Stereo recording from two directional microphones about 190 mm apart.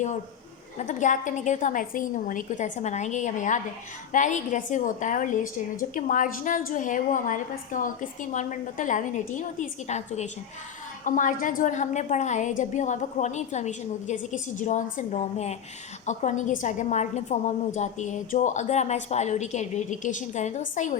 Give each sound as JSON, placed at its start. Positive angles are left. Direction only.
{"t": 0.8, "sound": "a woman's voice", "side_deg": 40}